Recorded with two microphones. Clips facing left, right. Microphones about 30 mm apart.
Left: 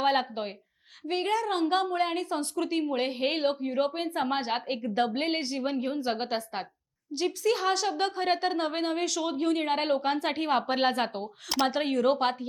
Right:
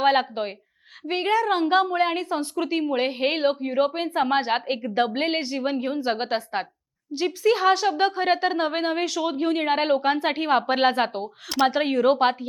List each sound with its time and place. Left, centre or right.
0.0 s a woman's voice: centre